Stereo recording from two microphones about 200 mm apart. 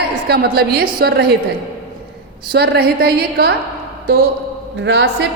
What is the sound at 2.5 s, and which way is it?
A woman's voice, 50° right (ahead or behind).